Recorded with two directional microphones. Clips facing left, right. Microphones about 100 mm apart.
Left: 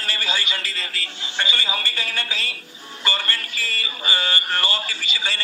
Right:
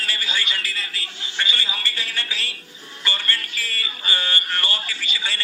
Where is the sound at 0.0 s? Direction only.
30° left (ahead or behind).